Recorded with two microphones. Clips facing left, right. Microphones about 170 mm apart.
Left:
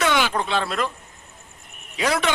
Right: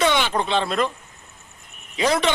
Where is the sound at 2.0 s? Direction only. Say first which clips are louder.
Right 2 dB; 5° left (ahead or behind).